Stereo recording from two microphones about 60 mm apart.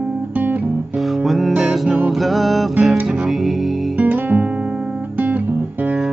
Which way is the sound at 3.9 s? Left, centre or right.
Right.